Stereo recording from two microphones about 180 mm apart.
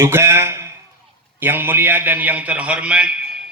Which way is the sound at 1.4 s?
10° right (ahead or behind).